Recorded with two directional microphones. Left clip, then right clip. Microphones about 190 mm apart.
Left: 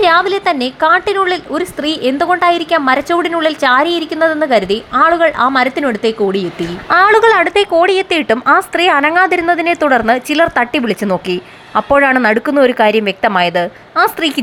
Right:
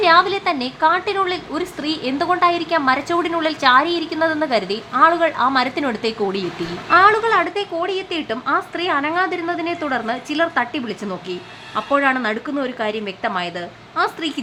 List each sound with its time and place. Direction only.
0.0 s a woman's voice: 30° left (ahead or behind)
6.9 s speech: 30° left (ahead or behind)